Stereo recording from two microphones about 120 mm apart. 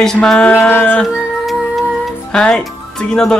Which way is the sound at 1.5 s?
Centre (ahead or behind).